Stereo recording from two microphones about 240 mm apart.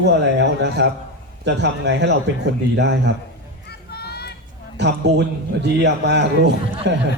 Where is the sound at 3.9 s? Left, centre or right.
Left.